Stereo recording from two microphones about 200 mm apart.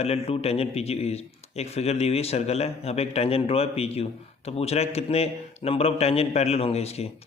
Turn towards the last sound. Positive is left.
turn(degrees=30)  # may be behind; listen again after turning